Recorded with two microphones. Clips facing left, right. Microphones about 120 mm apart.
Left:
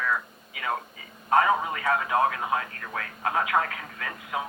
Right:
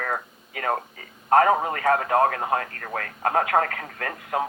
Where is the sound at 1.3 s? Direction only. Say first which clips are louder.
Right 4 dB; 50° right (ahead or behind).